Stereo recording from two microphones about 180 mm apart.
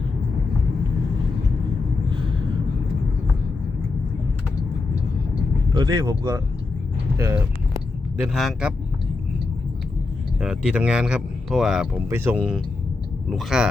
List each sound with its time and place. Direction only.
5.7 s speech: 25° right (ahead or behind)
8.2 s speech: centre (ahead or behind)
10.4 s speech: 5° right (ahead or behind)